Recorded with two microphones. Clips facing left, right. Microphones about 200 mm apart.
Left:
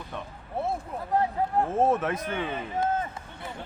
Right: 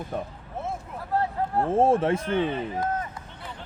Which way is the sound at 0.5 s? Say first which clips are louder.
Left 3 dB; 35° left (ahead or behind).